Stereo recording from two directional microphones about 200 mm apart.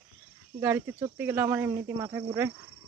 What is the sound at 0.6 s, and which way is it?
Speech, 10° right (ahead or behind).